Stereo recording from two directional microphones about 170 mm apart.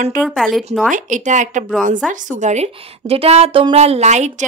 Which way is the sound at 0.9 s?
45° right (ahead or behind).